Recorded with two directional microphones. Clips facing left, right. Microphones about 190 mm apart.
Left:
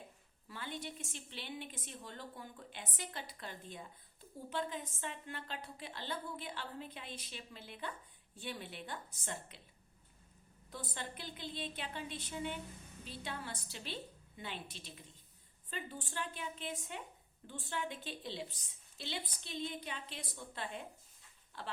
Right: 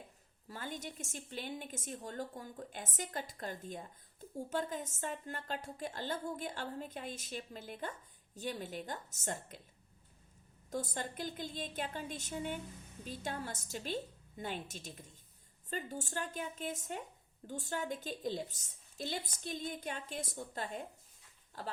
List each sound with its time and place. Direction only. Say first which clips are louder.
0.4 s a woman's voice: right 1 dB; 45° right (ahead or behind)
10.7 s a woman's voice: right 6 dB; 45° right (ahead or behind)